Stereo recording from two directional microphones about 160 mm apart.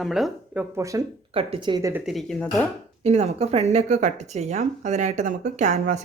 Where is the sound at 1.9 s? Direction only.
Centre (ahead or behind).